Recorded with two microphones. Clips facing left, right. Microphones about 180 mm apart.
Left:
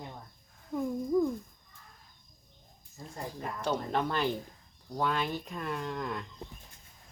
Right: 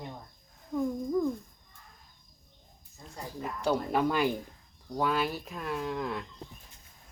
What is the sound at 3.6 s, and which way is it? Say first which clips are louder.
Speech: right 4 dB; 10° right (ahead or behind).